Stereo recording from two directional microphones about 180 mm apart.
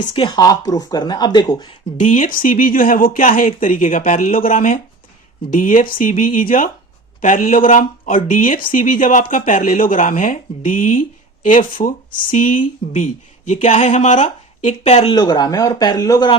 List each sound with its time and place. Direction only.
0.0 s speech: 35° left (ahead or behind)
0.3 s speech: 20° left (ahead or behind)
2.0 s speech: 45° left (ahead or behind)
15.1 s speech: 20° left (ahead or behind)